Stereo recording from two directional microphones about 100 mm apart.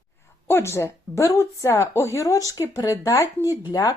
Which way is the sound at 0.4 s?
25° left (ahead or behind).